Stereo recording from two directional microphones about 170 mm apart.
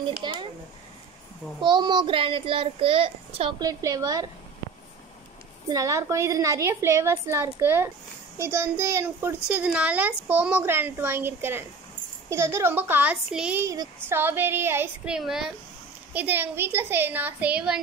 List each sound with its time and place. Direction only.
0.2 s a child's voice: 25° right (ahead or behind)
1.6 s a child's voice: 25° right (ahead or behind)
5.7 s a woman's voice: 20° right (ahead or behind)